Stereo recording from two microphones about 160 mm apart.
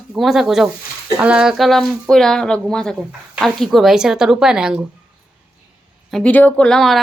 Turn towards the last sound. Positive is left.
turn(degrees=0)  # may be behind; listen again after turning